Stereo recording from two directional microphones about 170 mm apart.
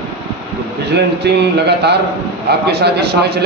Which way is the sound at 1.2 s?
75° right (ahead or behind).